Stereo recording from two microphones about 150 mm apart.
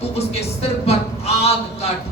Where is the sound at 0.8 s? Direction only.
45° left (ahead or behind).